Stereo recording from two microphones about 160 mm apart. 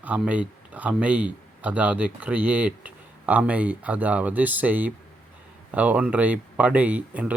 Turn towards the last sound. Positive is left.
turn(degrees=-10)  # may be behind; listen again after turning